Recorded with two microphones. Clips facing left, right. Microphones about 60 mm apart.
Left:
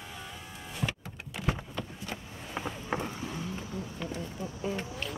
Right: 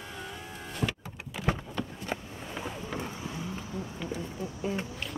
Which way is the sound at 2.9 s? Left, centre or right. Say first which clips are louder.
Left 1 dB; centre.